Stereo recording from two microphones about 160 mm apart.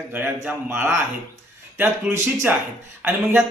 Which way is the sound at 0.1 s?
10° right (ahead or behind).